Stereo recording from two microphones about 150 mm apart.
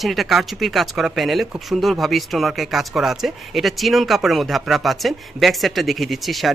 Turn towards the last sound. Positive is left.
turn(degrees=0)  # may be behind; listen again after turning